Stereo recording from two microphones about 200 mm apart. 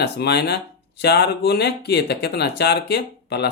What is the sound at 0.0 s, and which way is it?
Speech, 55° left (ahead or behind).